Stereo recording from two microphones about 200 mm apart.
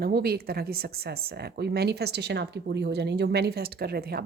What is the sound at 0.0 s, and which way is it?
Speech, 50° right (ahead or behind).